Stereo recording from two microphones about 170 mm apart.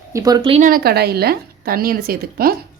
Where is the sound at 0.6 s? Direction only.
65° right (ahead or behind).